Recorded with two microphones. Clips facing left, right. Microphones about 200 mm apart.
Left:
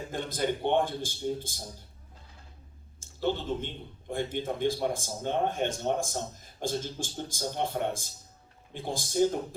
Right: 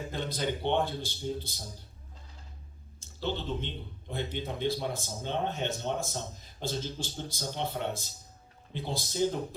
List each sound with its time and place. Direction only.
0.1 s speech: 50° left (ahead or behind)
3.0 s speech: 50° left (ahead or behind)